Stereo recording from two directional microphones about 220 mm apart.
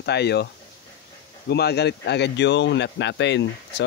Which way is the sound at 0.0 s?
50° left (ahead or behind).